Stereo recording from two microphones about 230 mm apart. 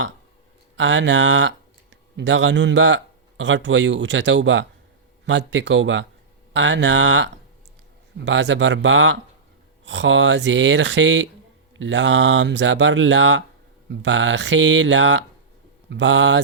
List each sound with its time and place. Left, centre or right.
0.8 s speech: right